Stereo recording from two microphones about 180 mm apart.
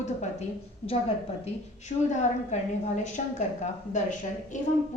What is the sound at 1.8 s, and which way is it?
A woman's voice, 40° left (ahead or behind).